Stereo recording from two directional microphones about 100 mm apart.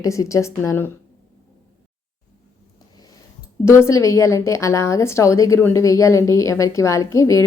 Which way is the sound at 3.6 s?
25° left (ahead or behind).